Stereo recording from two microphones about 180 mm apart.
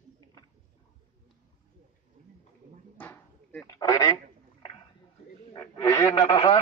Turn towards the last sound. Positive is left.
turn(degrees=35)  # may be behind; listen again after turning